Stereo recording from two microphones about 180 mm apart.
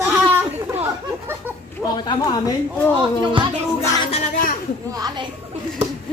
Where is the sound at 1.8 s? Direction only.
25° left (ahead or behind).